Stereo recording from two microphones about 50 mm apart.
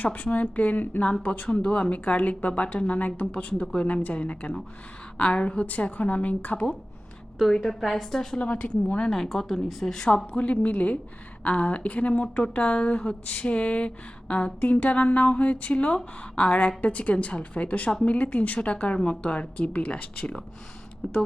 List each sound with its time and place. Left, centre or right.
0.0 s a woman's voice: left
1.5 s speech: left
7.5 s a woman's voice: centre
8.4 s speech: left
9.1 s a woman's voice: centre
10.3 s speech: left